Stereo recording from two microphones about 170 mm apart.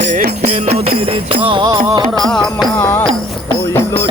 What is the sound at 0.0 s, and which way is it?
Music, 55° right (ahead or behind).